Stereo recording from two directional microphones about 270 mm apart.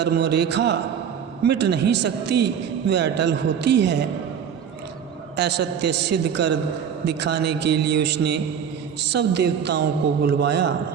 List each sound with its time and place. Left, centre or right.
0.0 s a man's voice: right
5.4 s a man's voice: right